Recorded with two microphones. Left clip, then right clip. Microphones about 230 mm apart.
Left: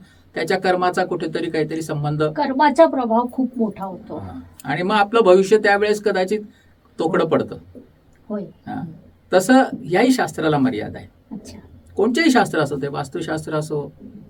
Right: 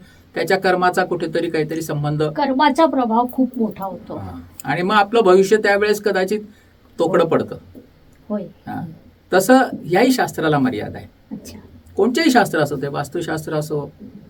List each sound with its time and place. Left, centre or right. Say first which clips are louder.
0.3 s speech: right 2 dB; centre
2.3 s speech: even; right
4.5 s speech: right 2 dB; centre
9.3 s speech: right 1 dB; centre